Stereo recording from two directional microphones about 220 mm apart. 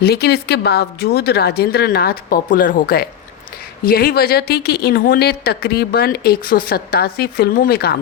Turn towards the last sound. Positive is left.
turn(degrees=45)  # may be behind; listen again after turning